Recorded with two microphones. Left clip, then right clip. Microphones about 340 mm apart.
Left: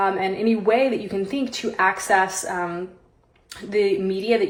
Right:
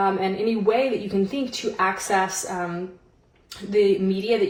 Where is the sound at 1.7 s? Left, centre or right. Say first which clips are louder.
Left 4 dB; left.